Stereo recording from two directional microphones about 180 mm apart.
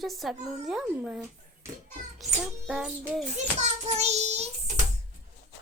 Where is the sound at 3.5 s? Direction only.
40° right (ahead or behind).